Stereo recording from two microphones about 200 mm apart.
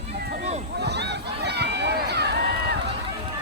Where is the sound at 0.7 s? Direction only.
55° right (ahead or behind).